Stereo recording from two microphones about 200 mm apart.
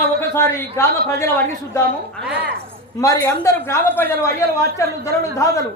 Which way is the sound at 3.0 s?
15° left (ahead or behind).